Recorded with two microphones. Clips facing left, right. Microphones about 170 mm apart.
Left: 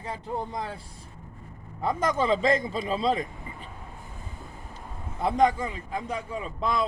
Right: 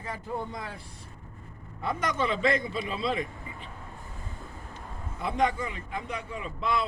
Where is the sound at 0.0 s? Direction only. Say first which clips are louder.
Left 2 dB; 30° left (ahead or behind).